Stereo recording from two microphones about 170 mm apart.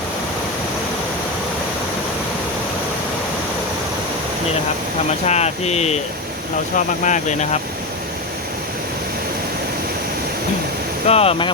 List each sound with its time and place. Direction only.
5.2 s speech: 40° left (ahead or behind)
11.0 s speech: 35° left (ahead or behind)